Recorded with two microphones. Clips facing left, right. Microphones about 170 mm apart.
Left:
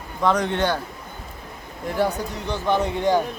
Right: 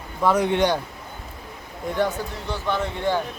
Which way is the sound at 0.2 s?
10° right (ahead or behind).